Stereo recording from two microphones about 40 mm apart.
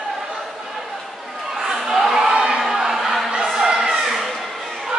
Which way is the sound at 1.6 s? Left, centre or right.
Centre.